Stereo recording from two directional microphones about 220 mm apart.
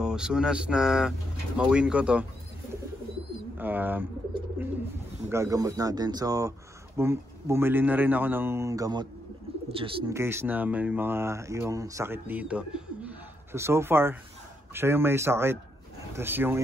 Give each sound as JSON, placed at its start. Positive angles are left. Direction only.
{"t": 0.0, "sound": "speech", "side_deg": -5}
{"t": 3.5, "sound": "speech", "side_deg": -10}
{"t": 4.6, "sound": "bird", "side_deg": -10}
{"t": 5.3, "sound": "speech", "side_deg": -15}
{"t": 10.1, "sound": "speech", "side_deg": -10}